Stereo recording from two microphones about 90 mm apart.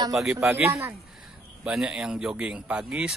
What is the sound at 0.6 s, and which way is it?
Speech, 30° right (ahead or behind).